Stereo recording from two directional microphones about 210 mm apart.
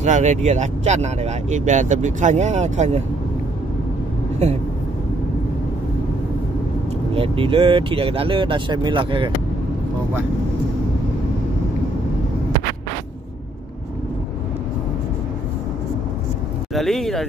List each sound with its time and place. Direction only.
0.0 s speech: 35° right (ahead or behind)
7.2 s speech: 25° right (ahead or behind)
16.7 s speech: centre (ahead or behind)